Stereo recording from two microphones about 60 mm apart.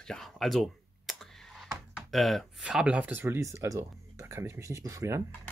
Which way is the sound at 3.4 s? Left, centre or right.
Right.